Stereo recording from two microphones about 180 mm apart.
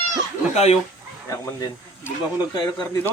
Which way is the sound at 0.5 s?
35° left (ahead or behind).